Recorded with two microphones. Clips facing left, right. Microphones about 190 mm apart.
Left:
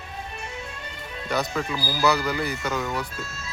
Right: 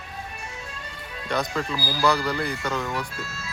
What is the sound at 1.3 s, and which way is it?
Speech, 5° left (ahead or behind).